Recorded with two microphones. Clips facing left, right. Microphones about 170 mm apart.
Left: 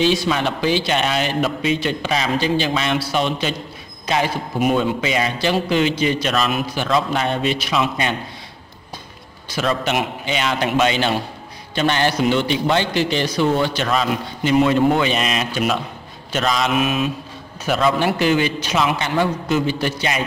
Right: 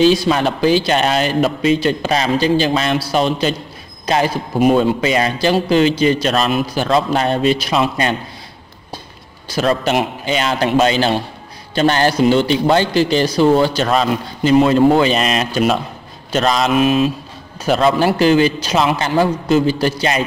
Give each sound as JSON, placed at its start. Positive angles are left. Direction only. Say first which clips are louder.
{"t": 0.0, "sound": "a man's voice", "louder": "right 5 dB", "side_deg": -40}
{"t": 9.5, "sound": "a man's voice", "louder": "right 5 dB", "side_deg": -40}